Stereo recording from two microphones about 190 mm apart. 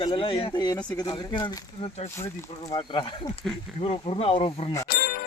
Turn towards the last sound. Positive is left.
turn(degrees=50)  # may be behind; listen again after turning